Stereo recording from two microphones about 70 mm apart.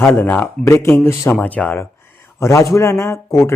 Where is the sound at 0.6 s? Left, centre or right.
Left.